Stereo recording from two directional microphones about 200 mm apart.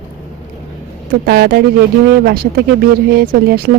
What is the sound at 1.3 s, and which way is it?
A man's voice, 50° right (ahead or behind).